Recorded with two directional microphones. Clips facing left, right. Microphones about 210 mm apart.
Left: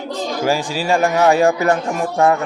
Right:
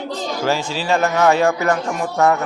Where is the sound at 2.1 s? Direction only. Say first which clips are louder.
Left 1 dB; 30° left (ahead or behind).